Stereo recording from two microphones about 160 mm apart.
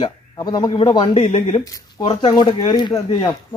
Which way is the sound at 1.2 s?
40° left (ahead or behind).